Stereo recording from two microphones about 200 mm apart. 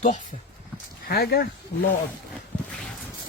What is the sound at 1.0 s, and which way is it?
Speech, 50° left (ahead or behind).